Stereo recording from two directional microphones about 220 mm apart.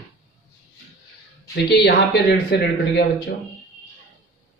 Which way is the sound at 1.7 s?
50° left (ahead or behind).